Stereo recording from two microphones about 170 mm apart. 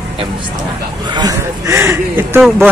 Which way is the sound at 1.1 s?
20° right (ahead or behind).